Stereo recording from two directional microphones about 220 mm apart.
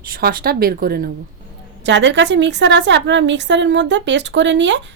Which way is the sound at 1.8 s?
55° right (ahead or behind).